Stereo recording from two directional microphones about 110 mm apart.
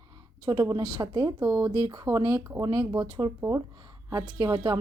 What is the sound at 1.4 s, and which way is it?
Speech, 25° right (ahead or behind).